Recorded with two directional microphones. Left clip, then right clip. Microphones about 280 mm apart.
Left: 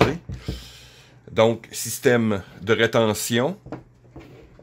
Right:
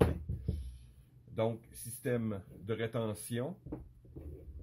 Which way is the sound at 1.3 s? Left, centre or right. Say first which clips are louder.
Left 17 dB; left.